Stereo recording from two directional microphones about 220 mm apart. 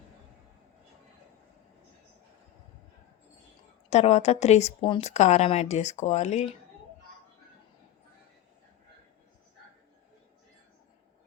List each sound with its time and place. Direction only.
3.8 s speech: 30° left (ahead or behind)